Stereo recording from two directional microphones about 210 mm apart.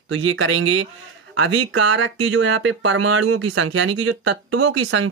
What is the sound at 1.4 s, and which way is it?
Speech, 65° right (ahead or behind).